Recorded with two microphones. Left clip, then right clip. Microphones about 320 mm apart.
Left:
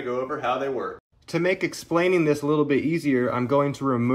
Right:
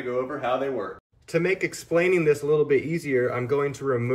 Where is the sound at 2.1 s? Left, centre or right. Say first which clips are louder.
Right 1 dB; centre.